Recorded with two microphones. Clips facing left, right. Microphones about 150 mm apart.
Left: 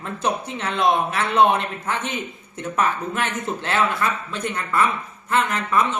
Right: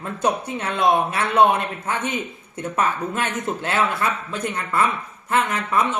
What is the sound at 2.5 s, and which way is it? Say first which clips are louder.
A man's voice: even; 20° right (ahead or behind).